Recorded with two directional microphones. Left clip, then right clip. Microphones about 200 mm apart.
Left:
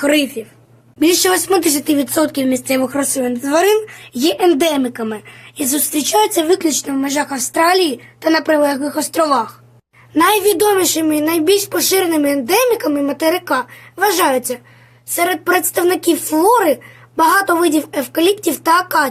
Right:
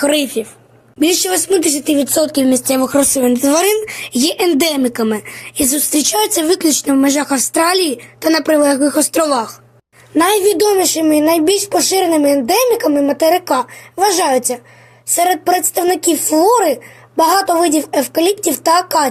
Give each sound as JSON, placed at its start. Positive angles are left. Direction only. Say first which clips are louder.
{"t": 0.0, "sound": "a woman's voice", "louder": "right 1 dB", "side_deg": -20}
{"t": 10.2, "sound": "a woman's voice", "louder": "right 1 dB", "side_deg": 0}